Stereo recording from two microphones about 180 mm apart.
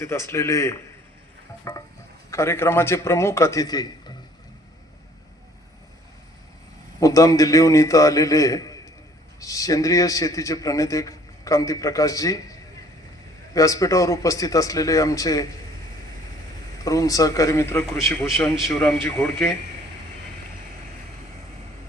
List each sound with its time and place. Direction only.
0.0 s a man's voice: 15° left (ahead or behind)
7.0 s a man's voice: 20° left (ahead or behind)
16.8 s a man's voice: 20° left (ahead or behind)
18.5 s a man's voice: centre (ahead or behind)
18.8 s a man's voice: 15° left (ahead or behind)